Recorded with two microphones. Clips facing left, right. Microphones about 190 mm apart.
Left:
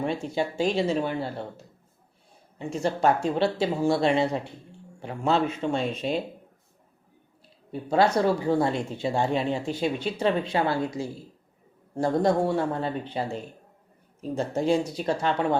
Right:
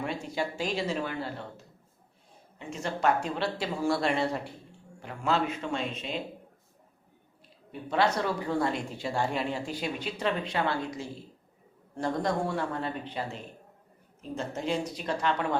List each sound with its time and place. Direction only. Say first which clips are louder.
0.0 s speech: left 5 dB; 25° left (ahead or behind)
2.6 s speech: left 6 dB; 30° left (ahead or behind)
7.7 s speech: left 5 dB; 35° left (ahead or behind)